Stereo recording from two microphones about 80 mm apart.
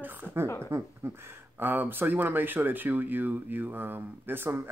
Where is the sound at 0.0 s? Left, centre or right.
Right.